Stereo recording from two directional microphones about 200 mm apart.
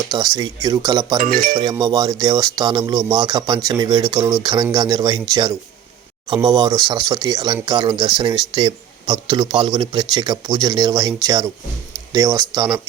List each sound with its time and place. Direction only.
0.1 s speech: 20° right (ahead or behind)
1.2 s speech: 50° right (ahead or behind)
1.5 s a man's voice: 20° right (ahead or behind)